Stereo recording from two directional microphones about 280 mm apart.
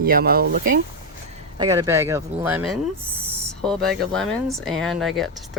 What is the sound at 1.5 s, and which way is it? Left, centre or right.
Speech, centre.